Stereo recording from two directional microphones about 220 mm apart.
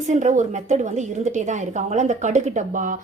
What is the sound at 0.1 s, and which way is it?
A woman's voice, 30° right (ahead or behind).